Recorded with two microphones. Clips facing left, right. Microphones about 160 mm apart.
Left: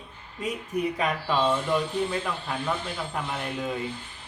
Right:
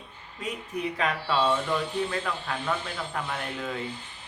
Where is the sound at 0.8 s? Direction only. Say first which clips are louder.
Left 2 dB; 10° left (ahead or behind).